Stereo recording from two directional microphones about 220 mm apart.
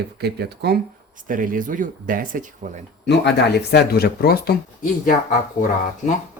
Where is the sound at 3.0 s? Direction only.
50° left (ahead or behind).